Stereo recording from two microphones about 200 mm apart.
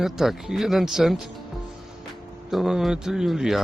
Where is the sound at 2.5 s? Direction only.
Centre (ahead or behind).